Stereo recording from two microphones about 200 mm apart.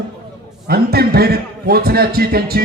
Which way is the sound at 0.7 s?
50° right (ahead or behind).